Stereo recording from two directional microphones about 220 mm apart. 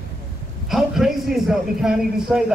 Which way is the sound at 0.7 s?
Centre (ahead or behind).